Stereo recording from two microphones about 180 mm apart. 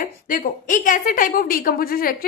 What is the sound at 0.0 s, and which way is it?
A woman's voice, 50° left (ahead or behind).